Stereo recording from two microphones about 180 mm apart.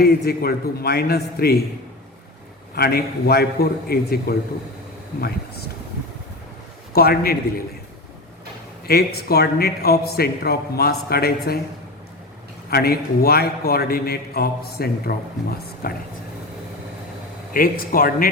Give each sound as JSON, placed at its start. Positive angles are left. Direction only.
{"t": 0.0, "sound": "a man's voice", "side_deg": 60}
{"t": 2.7, "sound": "a man's voice", "side_deg": 60}
{"t": 6.9, "sound": "a man's voice", "side_deg": 60}
{"t": 8.9, "sound": "a man's voice", "side_deg": 60}
{"t": 12.7, "sound": "a man's voice", "side_deg": 60}
{"t": 17.5, "sound": "speech", "side_deg": 50}